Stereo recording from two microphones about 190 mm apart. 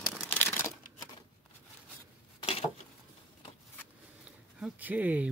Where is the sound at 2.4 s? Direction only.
30° left (ahead or behind).